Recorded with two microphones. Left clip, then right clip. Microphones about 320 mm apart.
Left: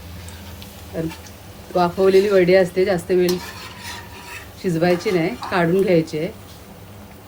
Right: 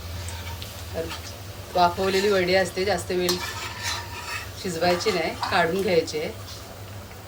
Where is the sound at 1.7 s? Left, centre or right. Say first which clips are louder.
Left 6 dB; left.